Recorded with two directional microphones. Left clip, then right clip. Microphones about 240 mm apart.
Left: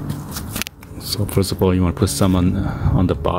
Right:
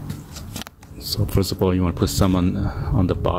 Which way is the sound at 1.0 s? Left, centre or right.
Centre.